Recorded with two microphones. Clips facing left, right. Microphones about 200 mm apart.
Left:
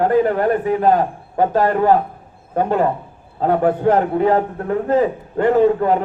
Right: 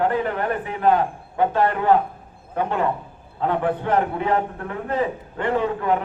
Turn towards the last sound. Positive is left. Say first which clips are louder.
# left 8 dB
turn(degrees=40)  # may be behind; listen again after turning